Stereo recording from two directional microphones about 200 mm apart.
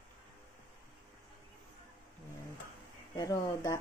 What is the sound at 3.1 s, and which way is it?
Speech, 20° left (ahead or behind).